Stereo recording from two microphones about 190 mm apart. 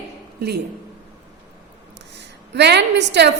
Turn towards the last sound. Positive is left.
turn(degrees=-65)  # may be behind; listen again after turning